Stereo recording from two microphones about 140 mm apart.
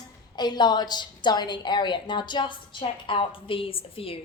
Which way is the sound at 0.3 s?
30° left (ahead or behind).